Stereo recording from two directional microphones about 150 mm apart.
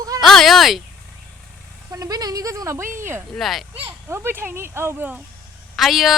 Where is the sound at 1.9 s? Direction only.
25° right (ahead or behind).